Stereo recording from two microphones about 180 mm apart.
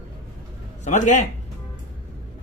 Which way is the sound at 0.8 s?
40° left (ahead or behind).